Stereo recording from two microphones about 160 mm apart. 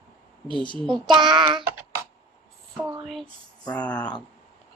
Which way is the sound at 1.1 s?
30° right (ahead or behind).